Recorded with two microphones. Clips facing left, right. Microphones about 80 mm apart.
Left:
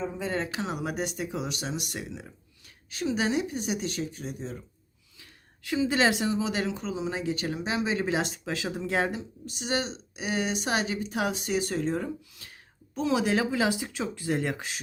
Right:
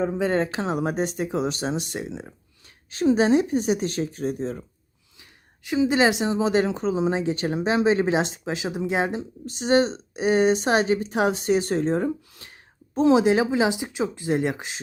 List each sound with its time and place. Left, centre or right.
0.0 s speech: right
0.3 s speech: right
5.2 s speech: centre; by 8.1 s right
8.1 s speech: right
9.5 s speech: right